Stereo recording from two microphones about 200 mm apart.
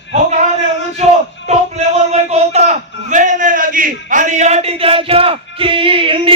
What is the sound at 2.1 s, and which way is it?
A man's voice, 35° right (ahead or behind).